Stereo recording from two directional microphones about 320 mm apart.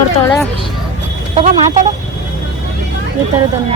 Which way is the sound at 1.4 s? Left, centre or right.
Right.